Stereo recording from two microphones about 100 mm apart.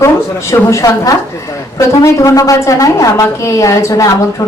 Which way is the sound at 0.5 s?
30° left (ahead or behind).